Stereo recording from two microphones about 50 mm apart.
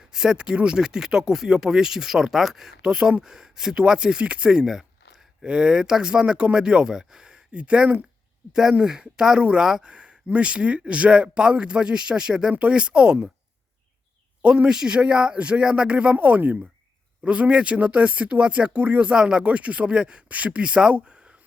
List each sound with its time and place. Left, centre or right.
0.0 s speech: centre
5.5 s speech: centre
14.4 s speech: centre
19.1 s speech: centre